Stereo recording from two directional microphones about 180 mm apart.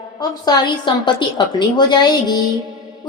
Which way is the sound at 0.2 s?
20° left (ahead or behind).